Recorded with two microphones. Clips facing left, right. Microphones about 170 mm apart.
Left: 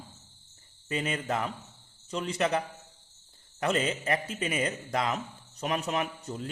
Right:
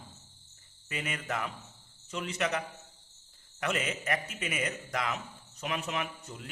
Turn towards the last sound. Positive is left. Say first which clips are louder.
# left 5 dB
turn(degrees=35)  # may be behind; listen again after turning